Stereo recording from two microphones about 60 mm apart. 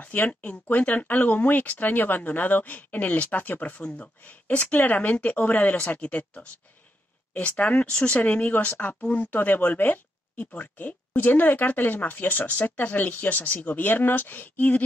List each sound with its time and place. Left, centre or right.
0.0 s speech: left
10.3 s speech: centre
10.6 s speech: left